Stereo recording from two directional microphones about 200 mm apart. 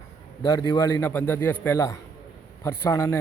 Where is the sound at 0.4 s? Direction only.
20° left (ahead or behind).